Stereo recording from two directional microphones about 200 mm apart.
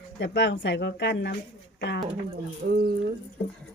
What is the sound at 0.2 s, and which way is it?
Speech, 60° left (ahead or behind).